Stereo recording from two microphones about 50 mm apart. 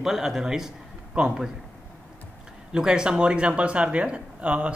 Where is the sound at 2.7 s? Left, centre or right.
Centre.